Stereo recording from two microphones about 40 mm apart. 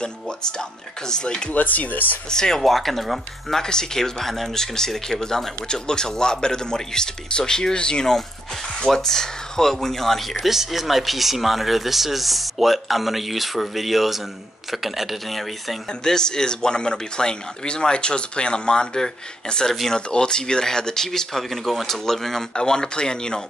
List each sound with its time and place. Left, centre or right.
0.0 s speech: centre
1.5 s speech: left
2.2 s speech: centre
2.6 s speech: centre
3.6 s speech: centre
10.4 s speech: centre
16.0 s speech: centre